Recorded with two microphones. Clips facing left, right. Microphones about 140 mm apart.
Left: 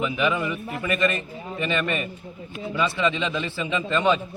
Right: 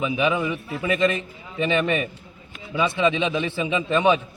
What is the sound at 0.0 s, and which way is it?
A man's voice, 15° right (ahead or behind).